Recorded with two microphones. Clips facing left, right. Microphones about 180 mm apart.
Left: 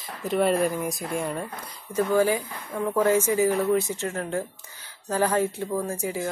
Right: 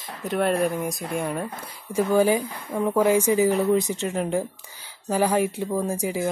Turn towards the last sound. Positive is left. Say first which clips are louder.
# right 3 dB
turn(degrees=-15)  # may be behind; listen again after turning